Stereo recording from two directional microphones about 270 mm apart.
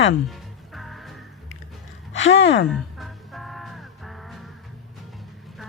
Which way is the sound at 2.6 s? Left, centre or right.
Centre.